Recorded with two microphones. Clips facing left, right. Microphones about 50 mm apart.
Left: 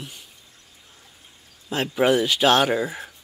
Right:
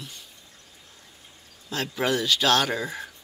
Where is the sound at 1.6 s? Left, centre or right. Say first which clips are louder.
Left 6 dB; left.